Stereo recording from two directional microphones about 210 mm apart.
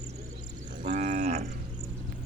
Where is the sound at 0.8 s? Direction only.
35° right (ahead or behind).